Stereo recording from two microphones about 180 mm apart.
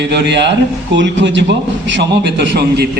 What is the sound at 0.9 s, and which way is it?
A man's voice, 90° right.